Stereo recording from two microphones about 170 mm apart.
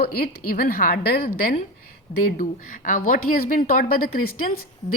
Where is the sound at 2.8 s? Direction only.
55° left (ahead or behind).